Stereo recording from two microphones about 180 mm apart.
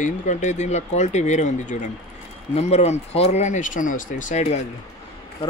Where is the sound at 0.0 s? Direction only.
40° left (ahead or behind).